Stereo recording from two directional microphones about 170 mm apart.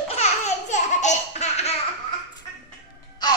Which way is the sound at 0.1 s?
40° left (ahead or behind).